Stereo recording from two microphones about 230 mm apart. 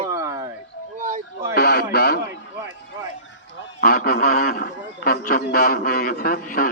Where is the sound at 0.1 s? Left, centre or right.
Centre.